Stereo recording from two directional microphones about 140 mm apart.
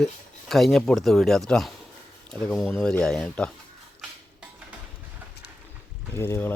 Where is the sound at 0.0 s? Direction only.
Centre (ahead or behind).